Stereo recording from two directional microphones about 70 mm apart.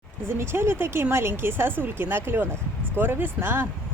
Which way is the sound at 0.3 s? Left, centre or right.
Right.